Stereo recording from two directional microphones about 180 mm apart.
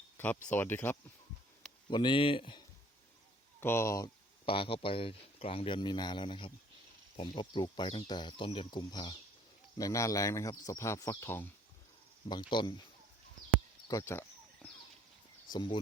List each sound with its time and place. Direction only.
0.2 s speech: 10° left (ahead or behind)
1.9 s speech: 25° left (ahead or behind)
3.6 s speech: 15° left (ahead or behind)
4.4 s speech: 30° left (ahead or behind); by 11.4 s 15° left (ahead or behind)
12.3 s speech: 25° left (ahead or behind)
13.8 s a sound: 15° left (ahead or behind)
15.5 s speech: 25° left (ahead or behind)